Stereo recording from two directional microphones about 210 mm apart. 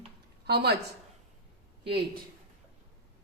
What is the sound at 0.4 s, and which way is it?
Speech, 50° right (ahead or behind).